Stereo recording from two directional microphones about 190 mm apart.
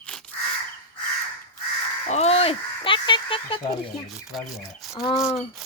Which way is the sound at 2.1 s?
35° left (ahead or behind).